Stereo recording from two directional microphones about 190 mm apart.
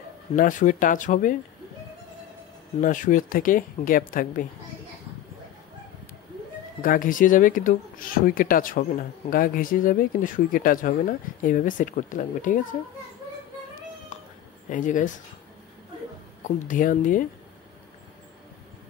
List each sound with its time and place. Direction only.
0.4 s speech: 45° left (ahead or behind)
2.8 s speech: 45° left (ahead or behind)
6.8 s speech: 45° left (ahead or behind)
14.7 s speech: 40° left (ahead or behind)
16.4 s speech: 45° left (ahead or behind)